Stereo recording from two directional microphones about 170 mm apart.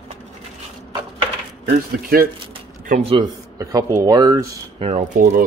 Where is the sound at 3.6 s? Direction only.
20° right (ahead or behind).